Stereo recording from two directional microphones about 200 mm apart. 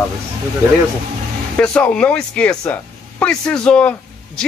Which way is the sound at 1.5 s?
5° left (ahead or behind).